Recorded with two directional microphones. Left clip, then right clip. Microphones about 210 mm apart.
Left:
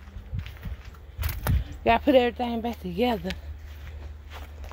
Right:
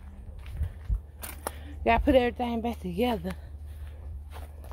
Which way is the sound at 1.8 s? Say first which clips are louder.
Left 3 dB; 15° left (ahead or behind).